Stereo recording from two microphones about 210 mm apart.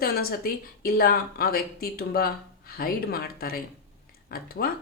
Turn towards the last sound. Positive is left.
turn(degrees=45)  # may be behind; listen again after turning